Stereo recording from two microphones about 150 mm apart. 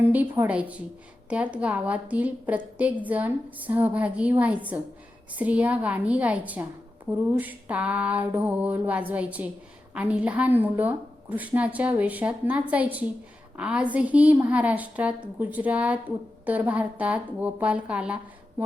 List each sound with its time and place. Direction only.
0.0 s a woman's voice: 10° right (ahead or behind)